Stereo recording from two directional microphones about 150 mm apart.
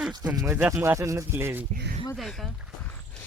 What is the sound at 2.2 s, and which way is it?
Speech, centre (ahead or behind).